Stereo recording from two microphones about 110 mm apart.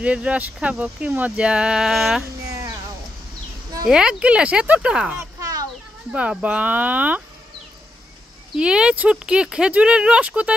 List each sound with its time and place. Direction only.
0.0 s speech: 10° right (ahead or behind)
2.5 s a sound: 30° right (ahead or behind)
3.9 s speech: 10° right (ahead or behind)
5.1 s a sound: 35° right (ahead or behind)
6.1 s speech: 10° right (ahead or behind)
8.5 s speech: 10° right (ahead or behind)